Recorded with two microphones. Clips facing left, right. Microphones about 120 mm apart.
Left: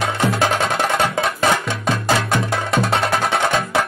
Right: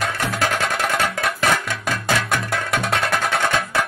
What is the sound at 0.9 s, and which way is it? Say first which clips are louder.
Music: left 3 dB; 25° left (ahead or behind).